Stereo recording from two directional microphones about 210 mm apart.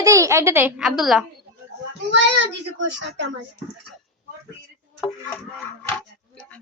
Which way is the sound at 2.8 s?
60° right (ahead or behind).